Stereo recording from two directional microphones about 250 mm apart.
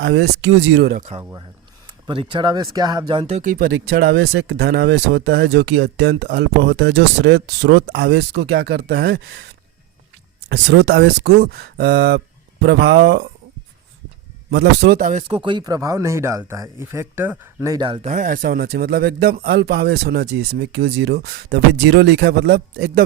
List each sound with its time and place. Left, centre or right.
0.0 s speech: right
1.2 s speech: centre; by 9.5 s right
10.5 s speech: right
14.5 s speech: right